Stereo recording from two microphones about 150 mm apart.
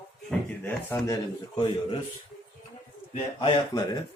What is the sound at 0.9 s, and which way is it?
Speech, 20° left (ahead or behind).